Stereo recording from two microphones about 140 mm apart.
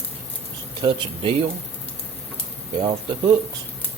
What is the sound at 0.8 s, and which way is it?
Speech, 40° right (ahead or behind).